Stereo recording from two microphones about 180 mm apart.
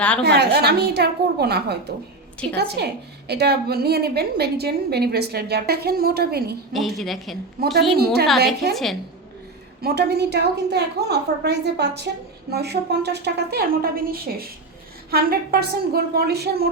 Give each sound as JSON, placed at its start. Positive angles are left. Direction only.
{"t": 0.2, "sound": "a woman's voice", "side_deg": -65}
{"t": 6.7, "sound": "a woman's voice", "side_deg": 0}
{"t": 7.6, "sound": "a woman's voice", "side_deg": -65}
{"t": 8.7, "sound": "a woman's voice", "side_deg": 0}
{"t": 9.8, "sound": "a woman's voice", "side_deg": -65}